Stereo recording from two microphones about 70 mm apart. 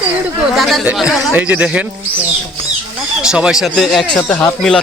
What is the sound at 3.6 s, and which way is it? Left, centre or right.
Speech, centre.